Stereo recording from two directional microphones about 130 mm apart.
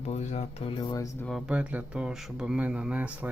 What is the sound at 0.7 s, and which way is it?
Speech, 35° left (ahead or behind).